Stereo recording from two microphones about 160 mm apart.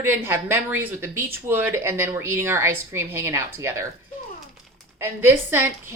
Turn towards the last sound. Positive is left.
turn(degrees=-15)  # may be behind; listen again after turning